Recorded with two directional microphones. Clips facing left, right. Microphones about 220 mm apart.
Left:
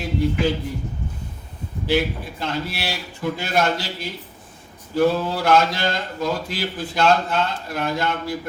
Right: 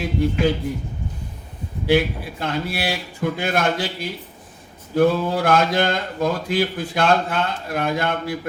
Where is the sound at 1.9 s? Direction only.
55° right (ahead or behind).